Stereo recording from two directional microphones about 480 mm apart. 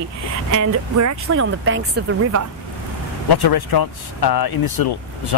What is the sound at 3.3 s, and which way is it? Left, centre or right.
Speech, left.